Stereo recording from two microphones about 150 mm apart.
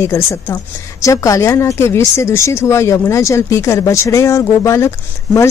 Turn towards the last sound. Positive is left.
turn(degrees=15)  # may be behind; listen again after turning